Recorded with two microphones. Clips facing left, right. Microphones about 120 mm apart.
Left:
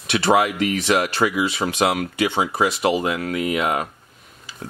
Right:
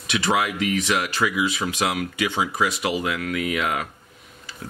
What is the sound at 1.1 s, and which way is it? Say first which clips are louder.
Speech: left 3 dB; 55° left (ahead or behind).